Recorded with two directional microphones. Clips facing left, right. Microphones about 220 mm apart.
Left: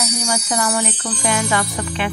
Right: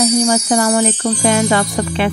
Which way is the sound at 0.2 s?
30° right (ahead or behind).